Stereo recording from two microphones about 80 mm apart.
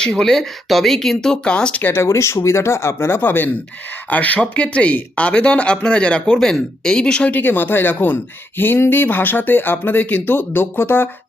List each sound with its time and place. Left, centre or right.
0.0 s speech: centre
1.8 s speech: left